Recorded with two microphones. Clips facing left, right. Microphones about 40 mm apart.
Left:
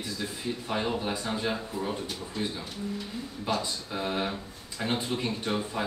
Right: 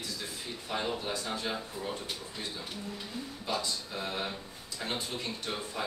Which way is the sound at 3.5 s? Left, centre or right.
Left.